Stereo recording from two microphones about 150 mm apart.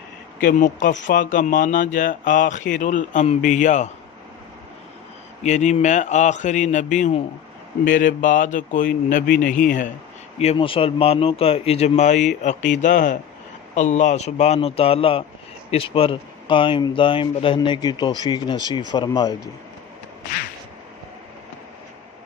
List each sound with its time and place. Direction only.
0.4 s speech: 60° left (ahead or behind)
5.4 s speech: 50° left (ahead or behind)
10.3 s speech: 45° left (ahead or behind); by 19.4 s 25° left (ahead or behind)